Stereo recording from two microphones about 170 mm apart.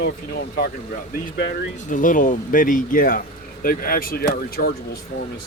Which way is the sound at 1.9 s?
50° left (ahead or behind).